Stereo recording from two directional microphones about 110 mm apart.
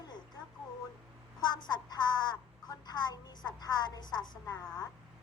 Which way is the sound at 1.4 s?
40° left (ahead or behind).